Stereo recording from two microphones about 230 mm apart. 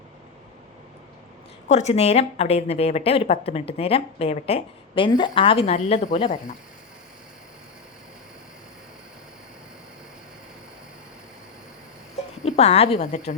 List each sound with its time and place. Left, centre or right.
1.6 s a woman's voice: left
12.4 s a woman's voice: left